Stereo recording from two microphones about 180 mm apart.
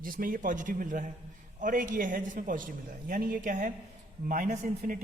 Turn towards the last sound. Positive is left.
turn(degrees=-50)  # may be behind; listen again after turning